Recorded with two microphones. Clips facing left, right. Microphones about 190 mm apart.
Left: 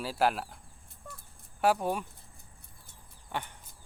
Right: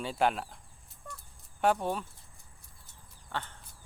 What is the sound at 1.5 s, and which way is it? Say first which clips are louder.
Speech: left 1 dB; 5° left (ahead or behind).